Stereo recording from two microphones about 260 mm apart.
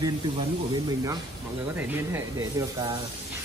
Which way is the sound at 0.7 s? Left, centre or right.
Centre.